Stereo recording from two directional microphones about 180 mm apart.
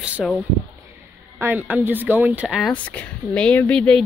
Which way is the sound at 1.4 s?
10° right (ahead or behind).